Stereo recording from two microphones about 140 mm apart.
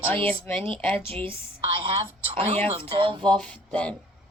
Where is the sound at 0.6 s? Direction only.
40° right (ahead or behind).